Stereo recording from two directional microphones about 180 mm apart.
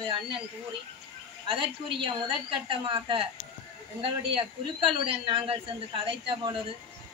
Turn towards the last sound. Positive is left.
turn(degrees=-30)  # may be behind; listen again after turning